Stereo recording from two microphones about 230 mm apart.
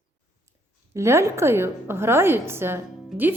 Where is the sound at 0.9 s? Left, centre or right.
Centre.